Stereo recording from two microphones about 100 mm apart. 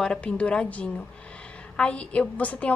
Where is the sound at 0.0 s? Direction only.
10° left (ahead or behind).